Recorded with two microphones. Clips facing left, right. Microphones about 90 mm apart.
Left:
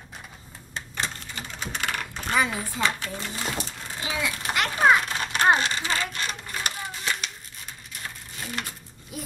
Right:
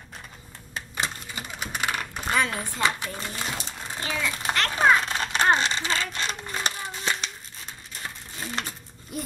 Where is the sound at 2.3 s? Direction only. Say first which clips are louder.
Left 1 dB; centre (ahead or behind).